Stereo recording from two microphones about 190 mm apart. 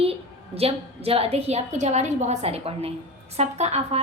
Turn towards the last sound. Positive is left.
turn(degrees=-35)  # may be behind; listen again after turning